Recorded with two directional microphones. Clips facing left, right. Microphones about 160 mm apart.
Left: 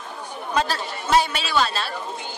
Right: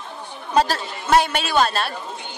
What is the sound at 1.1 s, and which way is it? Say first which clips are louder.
Speech: right 3 dB; 55° right (ahead or behind).